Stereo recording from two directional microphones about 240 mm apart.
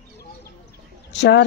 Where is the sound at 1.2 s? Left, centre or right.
Left.